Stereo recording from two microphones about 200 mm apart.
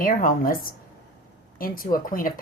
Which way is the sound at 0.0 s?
45° left (ahead or behind).